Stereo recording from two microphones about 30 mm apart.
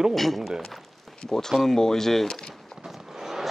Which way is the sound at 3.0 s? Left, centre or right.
Centre.